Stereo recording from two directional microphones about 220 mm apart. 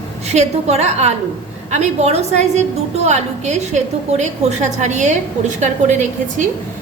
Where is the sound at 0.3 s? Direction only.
30° right (ahead or behind).